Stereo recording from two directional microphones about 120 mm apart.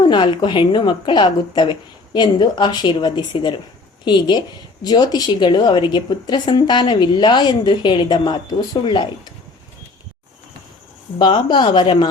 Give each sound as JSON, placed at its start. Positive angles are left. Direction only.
{"t": 0.0, "sound": "a woman's voice", "side_deg": 40}
{"t": 11.2, "sound": "a woman's voice", "side_deg": 40}